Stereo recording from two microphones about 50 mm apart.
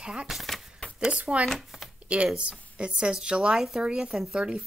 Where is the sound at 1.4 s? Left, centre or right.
Centre.